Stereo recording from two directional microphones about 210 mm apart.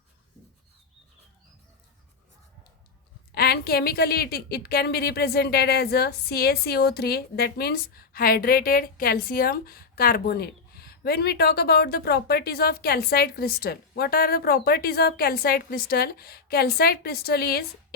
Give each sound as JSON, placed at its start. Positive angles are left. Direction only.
{"t": 3.3, "sound": "a woman's voice", "side_deg": 50}